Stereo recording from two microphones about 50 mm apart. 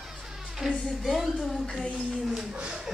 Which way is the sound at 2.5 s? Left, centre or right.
Centre.